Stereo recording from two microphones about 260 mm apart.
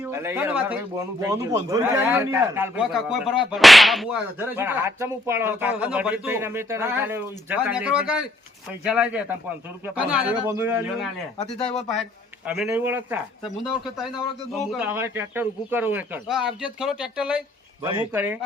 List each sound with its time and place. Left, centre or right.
0.1 s a man's voice: centre
12.5 s a man's voice: centre
14.7 s a man's voice: centre
17.8 s speech: centre